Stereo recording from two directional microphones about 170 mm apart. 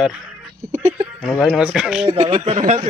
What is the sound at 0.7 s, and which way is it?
Speech, 45° right (ahead or behind).